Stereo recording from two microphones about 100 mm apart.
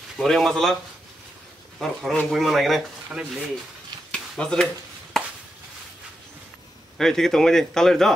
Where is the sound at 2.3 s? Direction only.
Centre (ahead or behind).